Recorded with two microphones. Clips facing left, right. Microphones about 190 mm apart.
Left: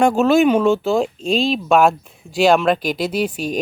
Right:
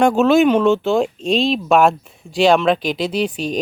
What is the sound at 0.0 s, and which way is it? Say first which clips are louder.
Speech: right 1 dB; 5° left (ahead or behind).